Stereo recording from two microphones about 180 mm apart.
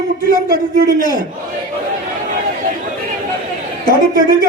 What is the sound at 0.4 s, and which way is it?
Speech, 55° right (ahead or behind).